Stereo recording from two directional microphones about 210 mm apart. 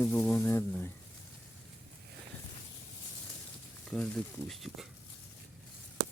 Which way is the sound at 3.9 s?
5° left (ahead or behind).